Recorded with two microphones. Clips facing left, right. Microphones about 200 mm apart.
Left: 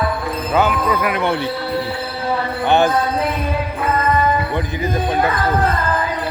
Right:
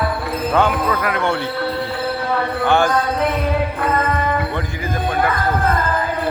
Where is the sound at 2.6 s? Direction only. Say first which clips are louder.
Left 2 dB; 20° left (ahead or behind).